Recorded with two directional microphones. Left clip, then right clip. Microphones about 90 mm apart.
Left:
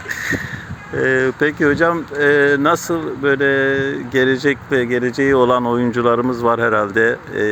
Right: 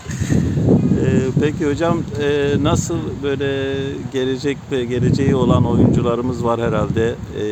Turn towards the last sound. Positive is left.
turn(degrees=5)  # may be behind; listen again after turning